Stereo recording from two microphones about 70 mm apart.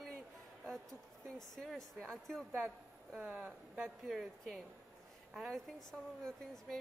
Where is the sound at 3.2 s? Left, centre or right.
Centre.